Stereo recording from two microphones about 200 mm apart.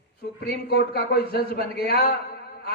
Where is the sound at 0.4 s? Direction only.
55° left (ahead or behind).